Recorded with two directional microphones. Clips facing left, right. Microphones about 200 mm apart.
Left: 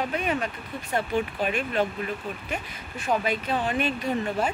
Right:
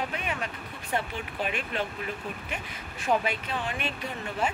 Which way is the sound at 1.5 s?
40° left (ahead or behind).